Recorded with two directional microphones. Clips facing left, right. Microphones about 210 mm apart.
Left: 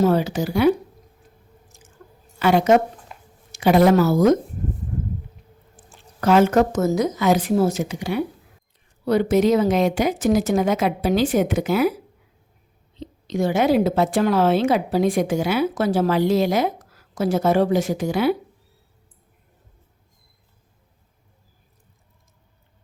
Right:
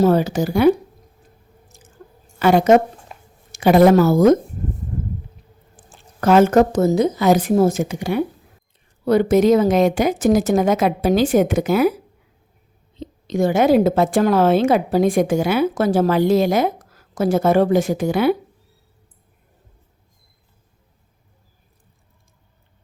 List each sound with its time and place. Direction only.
0.0 s a woman's voice: 45° right (ahead or behind)
1.6 s drip: 35° right (ahead or behind)
2.4 s a woman's voice: 45° right (ahead or behind)
3.1 s a sound: 20° right (ahead or behind)
3.5 s a woman's voice: 50° right (ahead or behind)
5.7 s squish: 45° right (ahead or behind)
6.8 s a woman's voice: 30° right (ahead or behind)
7.3 s a woman's voice: 50° right (ahead or behind)
13.0 s a woman's voice: 50° right (ahead or behind)